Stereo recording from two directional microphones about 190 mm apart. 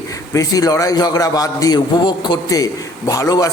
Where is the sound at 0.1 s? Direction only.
20° left (ahead or behind).